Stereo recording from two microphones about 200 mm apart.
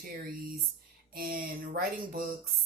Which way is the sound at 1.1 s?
45° right (ahead or behind).